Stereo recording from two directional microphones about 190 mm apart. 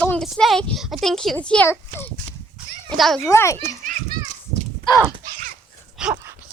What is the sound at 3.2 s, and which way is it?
Speech, 15° left (ahead or behind).